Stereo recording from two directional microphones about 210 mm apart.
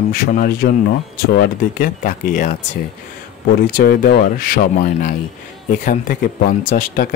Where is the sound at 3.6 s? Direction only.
45° left (ahead or behind).